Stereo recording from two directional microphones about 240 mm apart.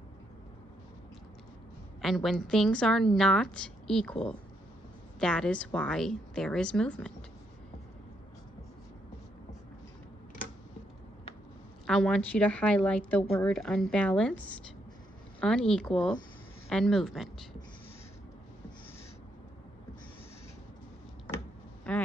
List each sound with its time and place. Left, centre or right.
2.0 s a woman's voice: centre
11.8 s a woman's voice: centre
21.9 s speech: centre